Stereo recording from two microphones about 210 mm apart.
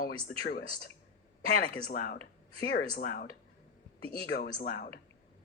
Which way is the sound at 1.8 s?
45° left (ahead or behind).